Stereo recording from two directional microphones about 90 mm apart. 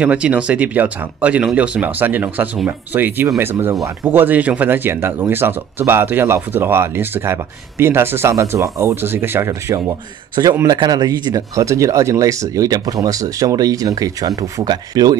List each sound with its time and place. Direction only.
0.0 s speech: 15° right (ahead or behind); by 15.1 s 45° right (ahead or behind)